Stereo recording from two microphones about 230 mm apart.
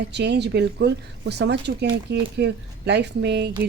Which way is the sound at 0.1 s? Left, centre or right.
Right.